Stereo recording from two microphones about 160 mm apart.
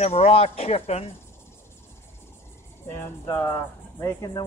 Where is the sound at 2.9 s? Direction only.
15° left (ahead or behind).